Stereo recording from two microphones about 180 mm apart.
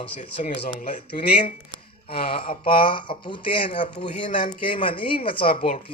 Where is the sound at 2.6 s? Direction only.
30° left (ahead or behind).